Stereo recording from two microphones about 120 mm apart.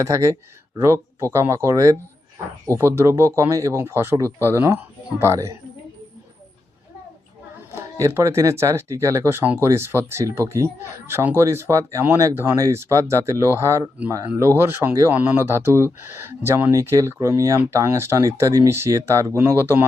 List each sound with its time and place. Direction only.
0.0 s speech: 25° right (ahead or behind)
7.7 s speech: 25° right (ahead or behind)
15.1 s speech: 15° right (ahead or behind)